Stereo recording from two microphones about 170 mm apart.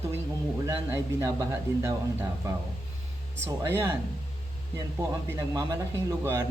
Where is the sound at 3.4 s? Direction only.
15° right (ahead or behind).